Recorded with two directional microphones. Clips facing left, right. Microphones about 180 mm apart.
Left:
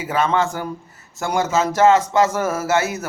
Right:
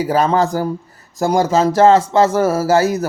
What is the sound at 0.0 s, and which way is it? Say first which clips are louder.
Speech: right 5 dB; 35° right (ahead or behind).